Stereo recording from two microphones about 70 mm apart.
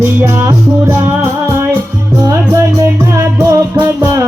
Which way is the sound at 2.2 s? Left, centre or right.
Right.